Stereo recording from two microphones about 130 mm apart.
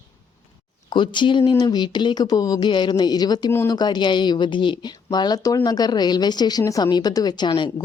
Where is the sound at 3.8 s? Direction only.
35° left (ahead or behind).